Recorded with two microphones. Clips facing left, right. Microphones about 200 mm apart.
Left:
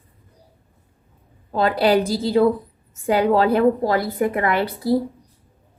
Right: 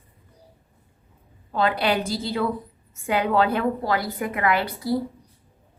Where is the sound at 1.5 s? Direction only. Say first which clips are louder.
Left 5 dB; 35° left (ahead or behind).